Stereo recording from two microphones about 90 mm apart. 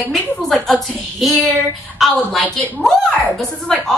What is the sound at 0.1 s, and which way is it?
A woman's voice, centre (ahead or behind).